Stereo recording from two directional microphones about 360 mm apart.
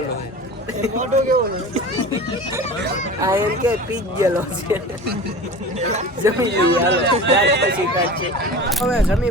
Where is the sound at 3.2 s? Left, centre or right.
Centre.